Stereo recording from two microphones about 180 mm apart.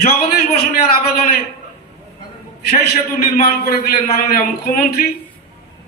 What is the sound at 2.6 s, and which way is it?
A man's voice, 55° left (ahead or behind).